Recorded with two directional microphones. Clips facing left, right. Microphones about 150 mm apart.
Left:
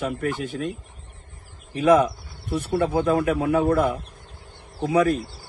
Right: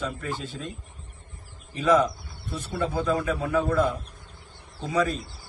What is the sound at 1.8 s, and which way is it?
A man's voice, 55° left (ahead or behind).